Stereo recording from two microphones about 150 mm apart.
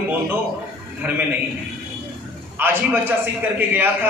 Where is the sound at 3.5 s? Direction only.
15° right (ahead or behind).